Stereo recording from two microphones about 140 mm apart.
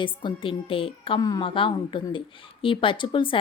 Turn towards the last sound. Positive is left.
turn(degrees=35)  # may be behind; listen again after turning